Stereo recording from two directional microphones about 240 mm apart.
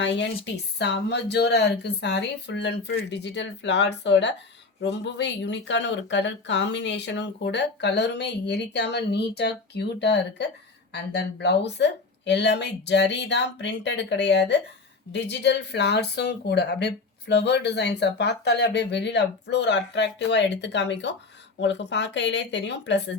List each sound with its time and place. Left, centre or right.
0.0 s speech: left